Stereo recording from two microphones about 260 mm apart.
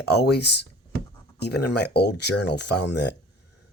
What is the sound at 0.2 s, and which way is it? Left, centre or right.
Speech, left.